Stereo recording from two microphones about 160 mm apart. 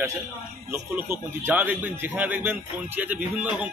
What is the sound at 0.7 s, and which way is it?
Speech, 15° right (ahead or behind).